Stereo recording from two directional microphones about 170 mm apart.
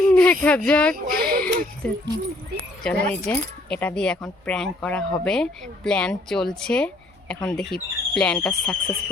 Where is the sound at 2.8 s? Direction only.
5° left (ahead or behind).